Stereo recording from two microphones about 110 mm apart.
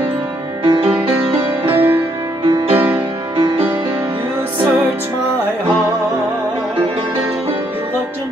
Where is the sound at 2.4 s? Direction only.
50° right (ahead or behind).